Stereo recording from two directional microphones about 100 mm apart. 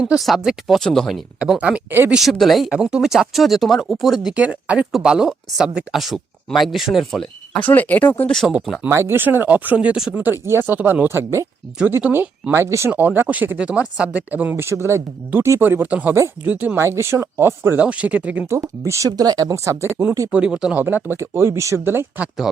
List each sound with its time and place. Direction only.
0.0 s speech: 5° right (ahead or behind)
1.4 s speech: 10° right (ahead or behind)
2.1 s speech: centre (ahead or behind)
7.6 s speech: 15° left (ahead or behind)
8.4 s speech: 5° right (ahead or behind)
8.9 s speech: 25° right (ahead or behind)
10.4 s speech: 25° right (ahead or behind)
16.7 s speech: 25° right (ahead or behind)
17.7 s speech: 15° right (ahead or behind)
18.5 s speech: 30° right (ahead or behind)
20.3 s speech: 10° right (ahead or behind)
20.8 s speech: 20° right (ahead or behind)